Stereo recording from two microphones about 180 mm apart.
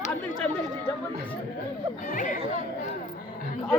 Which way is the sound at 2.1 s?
45° left (ahead or behind).